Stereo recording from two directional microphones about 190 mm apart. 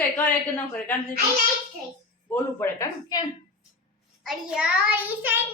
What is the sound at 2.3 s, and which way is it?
Speech, 15° left (ahead or behind).